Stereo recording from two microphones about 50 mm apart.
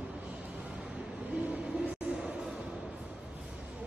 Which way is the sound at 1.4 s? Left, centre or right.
Right.